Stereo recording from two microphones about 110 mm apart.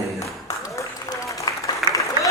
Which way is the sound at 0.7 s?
30° left (ahead or behind).